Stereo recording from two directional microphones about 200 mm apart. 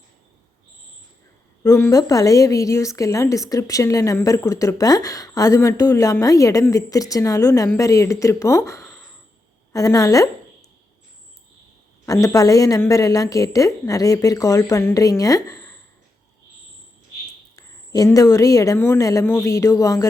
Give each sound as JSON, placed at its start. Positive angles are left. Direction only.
{"t": 1.6, "sound": "a woman's voice", "side_deg": 15}
{"t": 12.0, "sound": "a woman's voice", "side_deg": 15}
{"t": 17.6, "sound": "a woman's voice", "side_deg": 20}